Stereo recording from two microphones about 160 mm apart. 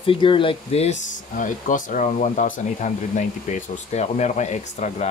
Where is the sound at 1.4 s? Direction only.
55° left (ahead or behind).